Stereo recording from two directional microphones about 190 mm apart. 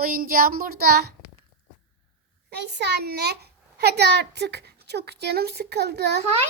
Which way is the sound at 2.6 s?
60° right (ahead or behind).